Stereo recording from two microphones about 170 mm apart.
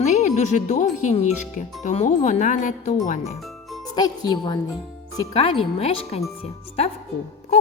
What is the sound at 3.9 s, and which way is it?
A woman's voice, 25° left (ahead or behind).